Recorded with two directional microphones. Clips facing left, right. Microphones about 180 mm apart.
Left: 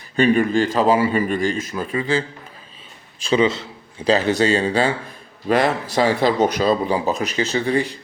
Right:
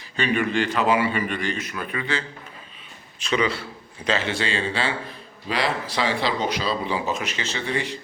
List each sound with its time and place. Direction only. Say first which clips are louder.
0.2 s speech: left 7 dB; 40° left (ahead or behind)
3.2 s a man's voice: left 6 dB; 25° left (ahead or behind)
4.0 s speech: left 8 dB; 40° left (ahead or behind)